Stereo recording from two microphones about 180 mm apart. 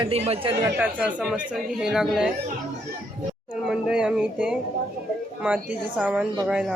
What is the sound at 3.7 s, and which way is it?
Speech, 5° right (ahead or behind).